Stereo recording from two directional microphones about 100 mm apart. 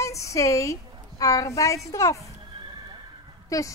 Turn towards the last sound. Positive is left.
turn(degrees=35)  # may be behind; listen again after turning